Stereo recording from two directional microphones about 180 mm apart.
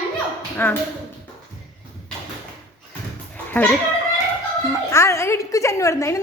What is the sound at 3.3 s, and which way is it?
Music, 10° left (ahead or behind).